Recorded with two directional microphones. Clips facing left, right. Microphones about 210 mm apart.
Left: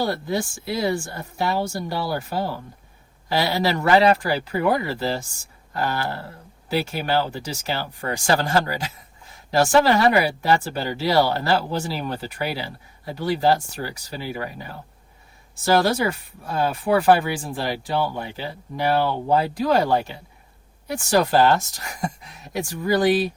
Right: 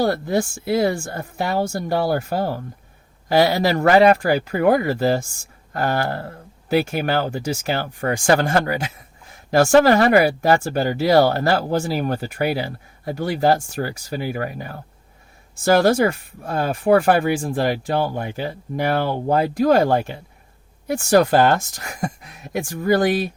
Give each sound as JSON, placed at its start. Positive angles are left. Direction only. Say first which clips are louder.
{"t": 0.0, "sound": "speech", "louder": "right 4 dB", "side_deg": -50}